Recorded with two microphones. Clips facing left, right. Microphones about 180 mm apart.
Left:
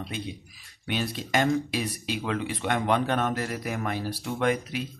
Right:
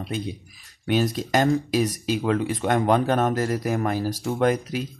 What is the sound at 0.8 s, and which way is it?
Speech, 45° right (ahead or behind).